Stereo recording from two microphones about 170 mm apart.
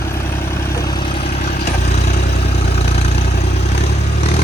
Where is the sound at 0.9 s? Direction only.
30° left (ahead or behind).